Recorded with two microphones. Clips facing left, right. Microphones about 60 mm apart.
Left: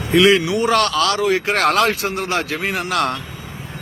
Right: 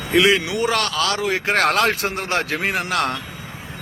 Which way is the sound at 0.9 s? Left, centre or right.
Centre.